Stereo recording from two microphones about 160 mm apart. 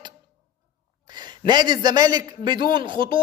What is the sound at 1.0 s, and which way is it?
A man's voice, 25° right (ahead or behind).